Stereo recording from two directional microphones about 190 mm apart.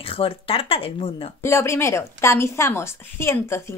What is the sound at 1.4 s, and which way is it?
A woman's voice, 15° left (ahead or behind).